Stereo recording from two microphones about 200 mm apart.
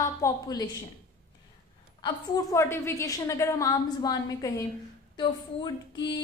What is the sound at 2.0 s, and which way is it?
A woman's voice, 15° left (ahead or behind).